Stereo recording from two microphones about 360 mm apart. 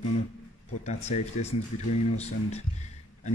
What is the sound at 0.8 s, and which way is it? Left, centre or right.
Speech, centre.